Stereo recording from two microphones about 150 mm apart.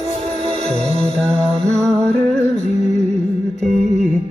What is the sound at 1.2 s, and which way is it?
Music, 5° left (ahead or behind).